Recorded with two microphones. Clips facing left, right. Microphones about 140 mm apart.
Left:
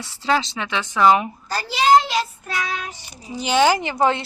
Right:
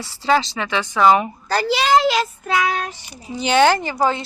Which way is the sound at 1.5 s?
85° right.